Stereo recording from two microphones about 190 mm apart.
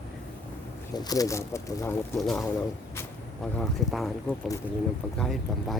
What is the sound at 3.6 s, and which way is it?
Speech, centre (ahead or behind).